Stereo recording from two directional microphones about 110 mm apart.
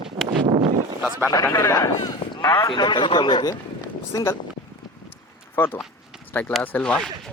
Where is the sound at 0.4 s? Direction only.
60° right (ahead or behind).